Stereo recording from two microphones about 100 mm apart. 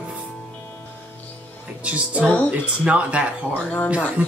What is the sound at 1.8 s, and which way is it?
Speech, 10° right (ahead or behind).